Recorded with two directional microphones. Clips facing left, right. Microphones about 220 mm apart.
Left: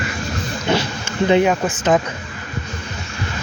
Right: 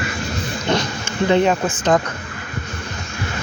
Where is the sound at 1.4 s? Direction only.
Centre (ahead or behind).